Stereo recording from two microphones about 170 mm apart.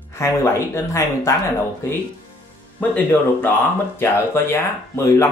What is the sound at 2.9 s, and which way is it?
Speech, 10° left (ahead or behind).